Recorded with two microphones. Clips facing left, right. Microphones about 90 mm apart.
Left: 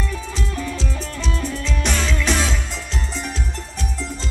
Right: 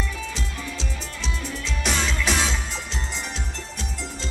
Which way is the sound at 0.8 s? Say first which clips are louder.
Left 5 dB; 40° left (ahead or behind).